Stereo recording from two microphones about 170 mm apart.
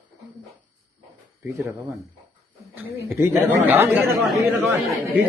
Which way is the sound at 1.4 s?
10° right (ahead or behind).